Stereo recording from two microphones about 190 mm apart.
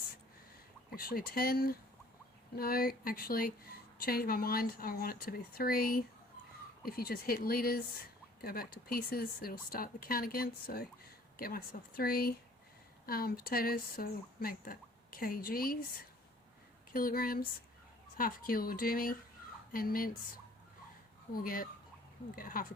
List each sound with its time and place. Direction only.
0.9 s a woman's voice: 50° left (ahead or behind)
16.9 s a woman's voice: 50° left (ahead or behind)
21.3 s a woman's voice: 50° left (ahead or behind)